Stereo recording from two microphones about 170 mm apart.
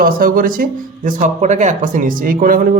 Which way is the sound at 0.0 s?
55° right (ahead or behind).